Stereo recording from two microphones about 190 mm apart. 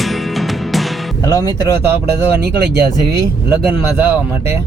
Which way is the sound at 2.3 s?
60° right (ahead or behind).